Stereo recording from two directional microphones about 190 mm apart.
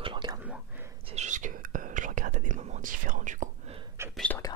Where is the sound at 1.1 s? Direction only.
40° right (ahead or behind).